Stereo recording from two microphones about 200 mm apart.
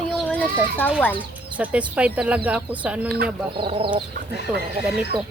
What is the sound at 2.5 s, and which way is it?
Speech, 5° right (ahead or behind).